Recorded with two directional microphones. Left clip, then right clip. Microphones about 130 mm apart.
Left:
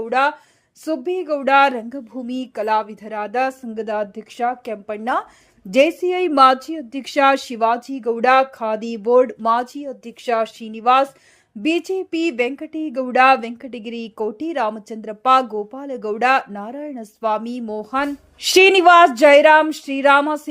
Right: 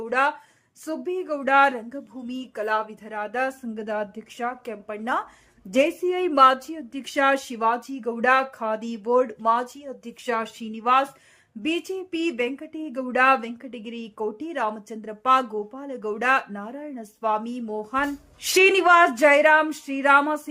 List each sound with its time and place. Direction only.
0.0 s speech: 35° left (ahead or behind)